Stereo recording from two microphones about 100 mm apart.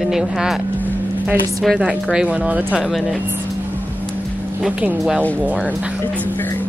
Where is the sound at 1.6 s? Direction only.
Centre (ahead or behind).